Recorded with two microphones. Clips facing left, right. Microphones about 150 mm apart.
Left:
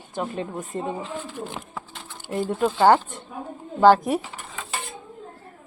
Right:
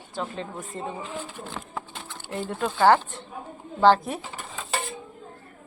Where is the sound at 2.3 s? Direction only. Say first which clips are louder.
Left 6 dB; 10° left (ahead or behind).